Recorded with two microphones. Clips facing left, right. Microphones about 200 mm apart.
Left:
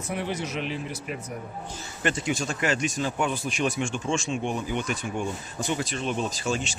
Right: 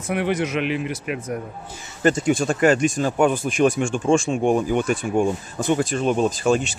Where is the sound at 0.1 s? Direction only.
80° right.